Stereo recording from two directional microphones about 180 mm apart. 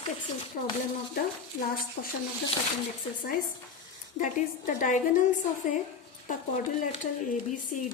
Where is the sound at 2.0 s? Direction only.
70° left (ahead or behind).